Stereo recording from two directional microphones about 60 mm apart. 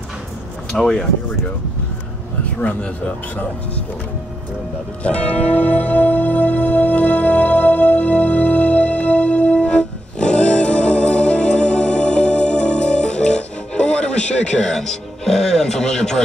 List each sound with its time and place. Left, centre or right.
0.7 s speech: centre
5.0 s music: left